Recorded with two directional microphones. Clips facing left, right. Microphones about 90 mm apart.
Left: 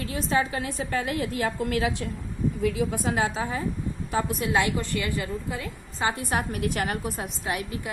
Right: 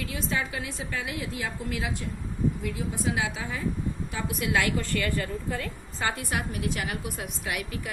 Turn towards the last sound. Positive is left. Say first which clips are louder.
# left 3 dB
turn(degrees=25)  # may be behind; listen again after turning